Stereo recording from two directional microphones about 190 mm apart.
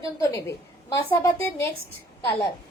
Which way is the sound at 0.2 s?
15° left (ahead or behind).